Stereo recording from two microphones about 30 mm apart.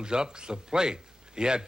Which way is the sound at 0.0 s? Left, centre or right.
Right.